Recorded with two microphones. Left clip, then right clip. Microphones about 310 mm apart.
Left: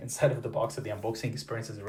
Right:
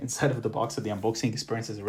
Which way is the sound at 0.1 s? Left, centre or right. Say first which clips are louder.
Left 1 dB; right.